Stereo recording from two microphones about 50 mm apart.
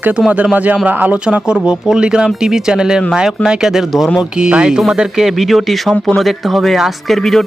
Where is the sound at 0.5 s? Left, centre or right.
Right.